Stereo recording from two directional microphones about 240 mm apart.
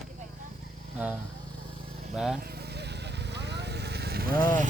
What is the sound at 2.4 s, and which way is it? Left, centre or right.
Vehicle, right.